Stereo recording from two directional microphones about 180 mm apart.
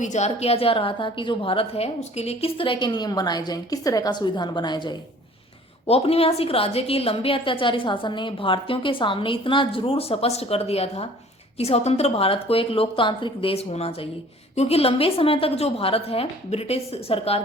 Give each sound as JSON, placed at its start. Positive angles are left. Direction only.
{"t": 0.0, "sound": "a woman's voice", "side_deg": 40}